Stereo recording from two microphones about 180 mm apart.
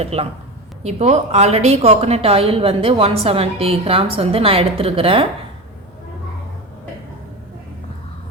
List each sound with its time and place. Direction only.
0.0 s a woman's voice: 35° right (ahead or behind)